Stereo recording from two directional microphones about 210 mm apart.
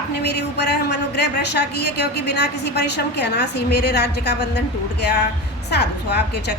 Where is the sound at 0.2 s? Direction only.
50° left (ahead or behind).